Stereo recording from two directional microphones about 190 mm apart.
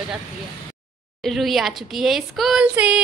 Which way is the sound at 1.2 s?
Centre (ahead or behind).